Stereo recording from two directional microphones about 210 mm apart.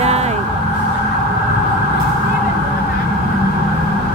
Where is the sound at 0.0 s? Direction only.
30° right (ahead or behind).